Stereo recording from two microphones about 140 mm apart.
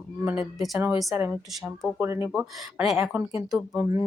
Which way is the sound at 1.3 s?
Centre (ahead or behind).